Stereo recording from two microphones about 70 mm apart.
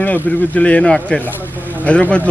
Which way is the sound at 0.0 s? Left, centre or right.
Left.